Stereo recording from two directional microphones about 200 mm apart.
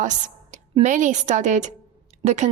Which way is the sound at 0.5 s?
35° right (ahead or behind).